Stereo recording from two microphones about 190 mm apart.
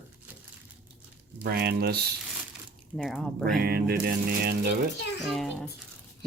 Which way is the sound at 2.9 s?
5° left (ahead or behind).